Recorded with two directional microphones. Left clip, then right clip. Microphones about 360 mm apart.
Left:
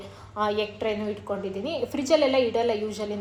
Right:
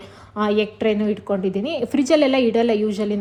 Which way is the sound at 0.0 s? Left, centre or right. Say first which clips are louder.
Right 4 dB; right.